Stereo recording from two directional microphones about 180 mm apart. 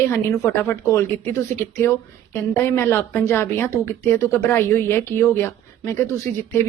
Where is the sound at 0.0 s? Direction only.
15° left (ahead or behind).